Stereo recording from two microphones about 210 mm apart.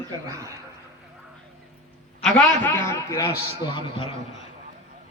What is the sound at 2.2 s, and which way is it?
A man's voice, 10° left (ahead or behind).